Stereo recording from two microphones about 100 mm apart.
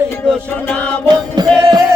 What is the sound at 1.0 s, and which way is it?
Music, 45° right (ahead or behind).